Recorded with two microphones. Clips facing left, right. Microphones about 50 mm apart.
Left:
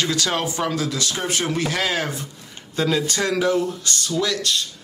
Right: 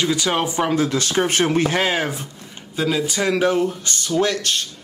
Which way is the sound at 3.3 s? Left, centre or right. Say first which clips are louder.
Right 2 dB; right.